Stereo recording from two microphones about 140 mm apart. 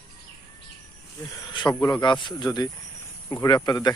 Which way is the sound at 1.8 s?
30° left (ahead or behind).